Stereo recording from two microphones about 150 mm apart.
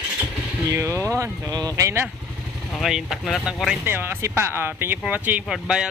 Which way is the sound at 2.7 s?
Centre (ahead or behind).